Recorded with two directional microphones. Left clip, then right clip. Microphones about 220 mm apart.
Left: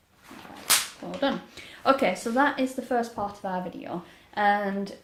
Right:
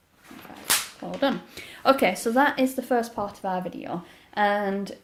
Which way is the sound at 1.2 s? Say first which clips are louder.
Right 2 dB; 40° right (ahead or behind).